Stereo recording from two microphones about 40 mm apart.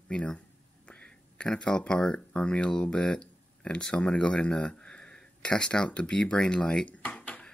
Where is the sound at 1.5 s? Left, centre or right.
Left.